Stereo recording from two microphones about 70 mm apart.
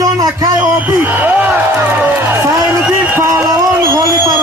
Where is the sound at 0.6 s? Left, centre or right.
Right.